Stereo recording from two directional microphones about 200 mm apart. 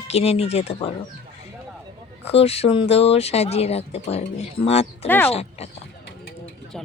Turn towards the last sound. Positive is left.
turn(degrees=30)  # may be behind; listen again after turning